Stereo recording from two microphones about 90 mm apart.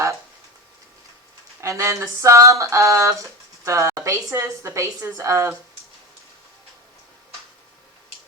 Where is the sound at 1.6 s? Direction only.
35° right (ahead or behind).